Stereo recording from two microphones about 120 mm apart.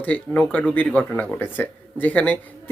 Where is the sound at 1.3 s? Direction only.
15° left (ahead or behind).